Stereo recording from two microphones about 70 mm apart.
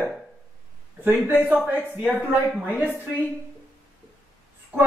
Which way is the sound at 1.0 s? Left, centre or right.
Right.